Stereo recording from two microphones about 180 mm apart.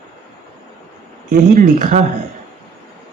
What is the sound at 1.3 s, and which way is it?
Speech, 45° right (ahead or behind).